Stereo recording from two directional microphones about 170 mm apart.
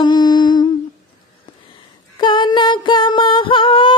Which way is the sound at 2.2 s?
25° left (ahead or behind).